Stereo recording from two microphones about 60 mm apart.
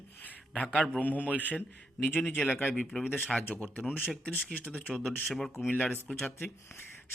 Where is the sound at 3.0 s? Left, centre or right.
Left.